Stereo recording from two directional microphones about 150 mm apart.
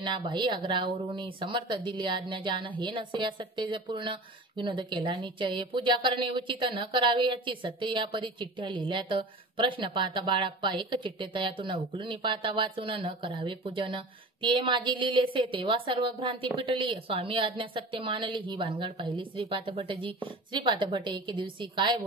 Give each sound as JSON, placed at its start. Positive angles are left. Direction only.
{"t": 0.0, "sound": "speech", "side_deg": -30}